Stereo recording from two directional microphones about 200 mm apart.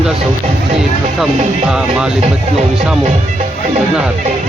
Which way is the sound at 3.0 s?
35° right (ahead or behind).